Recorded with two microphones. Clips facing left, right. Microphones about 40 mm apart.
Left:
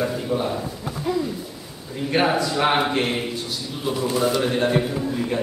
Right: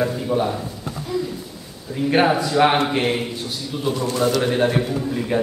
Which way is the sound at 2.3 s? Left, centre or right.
Centre.